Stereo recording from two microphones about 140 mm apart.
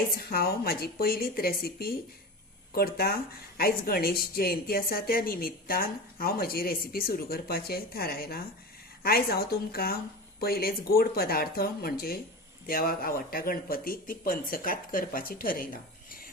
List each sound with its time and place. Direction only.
0.3 s a woman's voice: 90° left